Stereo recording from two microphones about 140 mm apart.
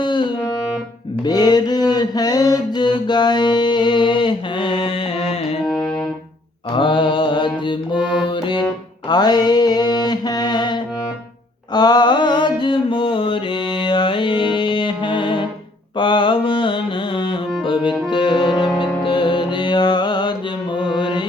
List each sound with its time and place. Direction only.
0.0 s music: 35° left (ahead or behind)
1.2 s mantra: 30° left (ahead or behind)
5.3 s music: 45° left (ahead or behind)
5.6 s music: 5° left (ahead or behind)
6.7 s music: 35° left (ahead or behind)
9.0 s mantra: 30° left (ahead or behind)
17.6 s music: 40° left (ahead or behind)